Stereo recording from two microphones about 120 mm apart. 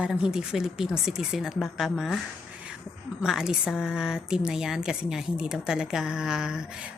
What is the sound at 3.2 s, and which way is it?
A woman's voice, 5° right (ahead or behind).